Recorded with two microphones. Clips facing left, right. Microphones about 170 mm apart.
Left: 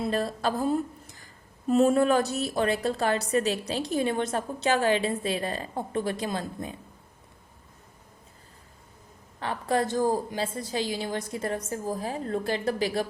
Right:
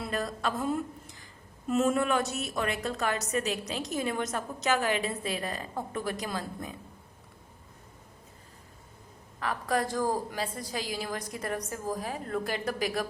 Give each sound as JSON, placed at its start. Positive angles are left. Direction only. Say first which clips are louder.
{"t": 0.0, "sound": "speech", "louder": "left 5 dB", "side_deg": 30}
{"t": 9.4, "sound": "a woman's voice", "louder": "left 3 dB", "side_deg": 25}